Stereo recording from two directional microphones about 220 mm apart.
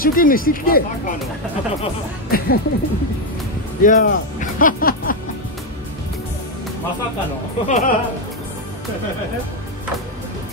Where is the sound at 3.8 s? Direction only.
35° left (ahead or behind).